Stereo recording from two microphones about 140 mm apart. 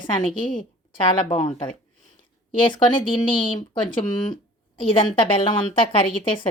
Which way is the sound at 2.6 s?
35° left (ahead or behind).